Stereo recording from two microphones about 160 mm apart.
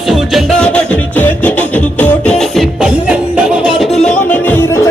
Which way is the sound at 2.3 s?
Centre (ahead or behind).